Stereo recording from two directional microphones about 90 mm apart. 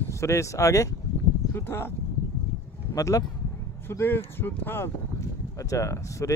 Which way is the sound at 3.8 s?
25° left (ahead or behind).